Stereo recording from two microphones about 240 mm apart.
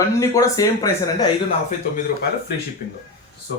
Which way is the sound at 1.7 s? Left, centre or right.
Left.